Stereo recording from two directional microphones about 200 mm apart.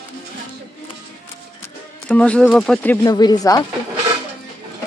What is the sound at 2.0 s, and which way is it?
Speech, 5° left (ahead or behind).